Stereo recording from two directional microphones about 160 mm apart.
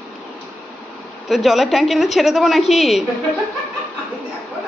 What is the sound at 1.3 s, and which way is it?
A woman's voice, centre (ahead or behind).